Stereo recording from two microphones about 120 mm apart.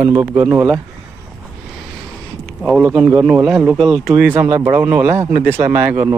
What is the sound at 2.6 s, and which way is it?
Speech, 10° right (ahead or behind).